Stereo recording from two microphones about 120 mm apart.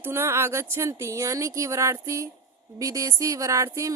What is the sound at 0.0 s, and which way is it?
Speech, 20° right (ahead or behind).